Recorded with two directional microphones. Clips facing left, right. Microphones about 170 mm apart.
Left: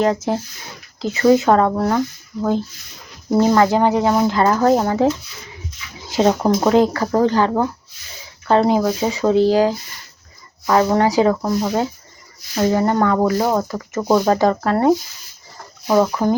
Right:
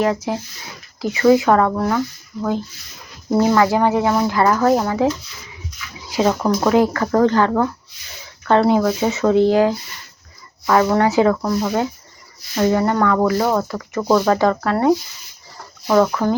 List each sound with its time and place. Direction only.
0.0 s speech: 30° left (ahead or behind)
3.5 s speech: 25° left (ahead or behind)
7.1 s speech: 15° left (ahead or behind)
8.4 s speech: 30° left (ahead or behind)
15.9 s speech: 15° left (ahead or behind)